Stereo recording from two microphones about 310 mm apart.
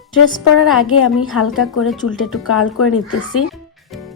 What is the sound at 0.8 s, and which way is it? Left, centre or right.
Speech, left.